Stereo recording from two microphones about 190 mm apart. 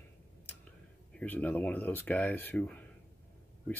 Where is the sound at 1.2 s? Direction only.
10° left (ahead or behind).